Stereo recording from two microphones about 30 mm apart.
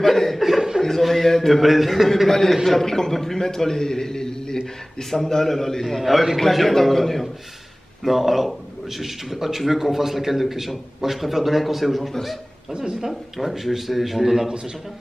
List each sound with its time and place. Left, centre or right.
0.0 s speech: centre
0.4 s chuckle: centre
1.0 s a man's voice: centre
2.2 s a man's voice: centre
2.8 s a man's voice: centre
5.1 s a man's voice: centre
5.9 s a man's voice: centre
8.0 s a man's voice: centre
12.7 s speech: right
13.1 s a man's voice: centre